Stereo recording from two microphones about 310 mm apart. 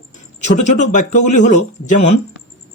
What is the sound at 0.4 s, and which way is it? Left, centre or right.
Speech, left.